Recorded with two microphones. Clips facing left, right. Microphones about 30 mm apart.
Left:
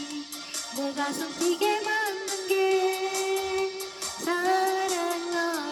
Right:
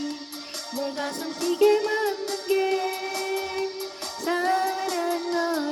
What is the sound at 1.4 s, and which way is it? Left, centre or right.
Music, left.